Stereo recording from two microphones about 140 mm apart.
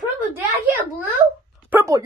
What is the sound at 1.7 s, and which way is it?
Speech, 15° right (ahead or behind).